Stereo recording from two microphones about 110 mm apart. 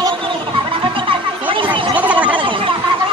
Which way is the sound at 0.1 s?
50° right (ahead or behind).